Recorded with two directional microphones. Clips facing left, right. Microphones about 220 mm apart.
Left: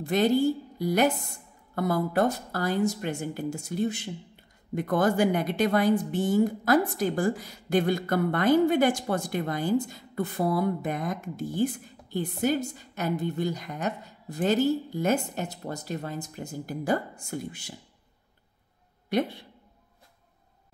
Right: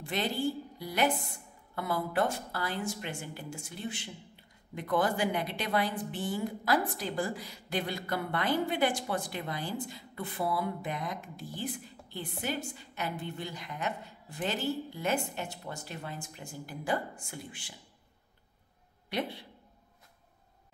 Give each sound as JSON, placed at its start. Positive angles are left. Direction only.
{"t": 0.0, "sound": "a woman's voice", "side_deg": 45}
{"t": 19.0, "sound": "speech", "side_deg": 45}